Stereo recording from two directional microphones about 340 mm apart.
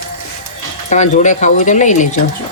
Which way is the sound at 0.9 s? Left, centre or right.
Left.